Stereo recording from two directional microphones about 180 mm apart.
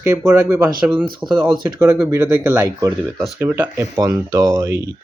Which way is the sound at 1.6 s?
20° right (ahead or behind).